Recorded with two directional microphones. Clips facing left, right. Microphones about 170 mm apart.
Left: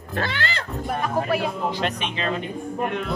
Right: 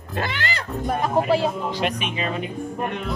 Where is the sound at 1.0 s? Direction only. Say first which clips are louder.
Right 4 dB; 30° right (ahead or behind).